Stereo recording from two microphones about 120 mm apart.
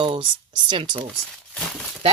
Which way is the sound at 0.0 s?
45° right (ahead or behind).